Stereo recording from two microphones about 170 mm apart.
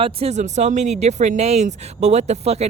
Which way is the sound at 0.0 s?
35° right (ahead or behind).